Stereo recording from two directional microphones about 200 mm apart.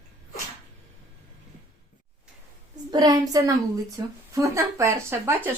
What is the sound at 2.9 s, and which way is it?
A woman's voice, 20° right (ahead or behind).